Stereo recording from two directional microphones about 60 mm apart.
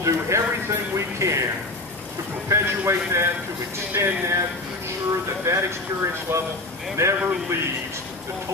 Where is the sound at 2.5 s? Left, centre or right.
Right.